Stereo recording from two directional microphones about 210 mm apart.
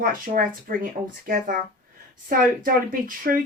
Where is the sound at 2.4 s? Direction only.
40° right (ahead or behind).